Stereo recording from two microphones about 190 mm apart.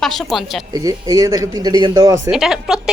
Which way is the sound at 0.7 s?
20° right (ahead or behind).